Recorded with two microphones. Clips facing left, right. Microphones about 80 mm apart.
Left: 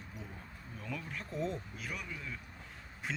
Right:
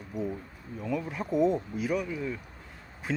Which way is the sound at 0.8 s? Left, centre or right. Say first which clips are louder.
Right 11 dB; centre.